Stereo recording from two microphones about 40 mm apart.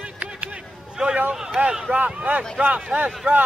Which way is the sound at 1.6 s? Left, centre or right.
Right.